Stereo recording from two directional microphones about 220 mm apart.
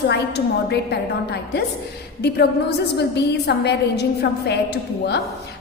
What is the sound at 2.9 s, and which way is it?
A woman's voice, 50° left (ahead or behind).